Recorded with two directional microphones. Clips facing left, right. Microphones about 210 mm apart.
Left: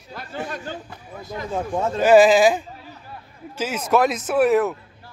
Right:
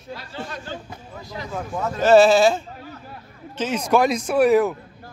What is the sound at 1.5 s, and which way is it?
Speech, 30° left (ahead or behind).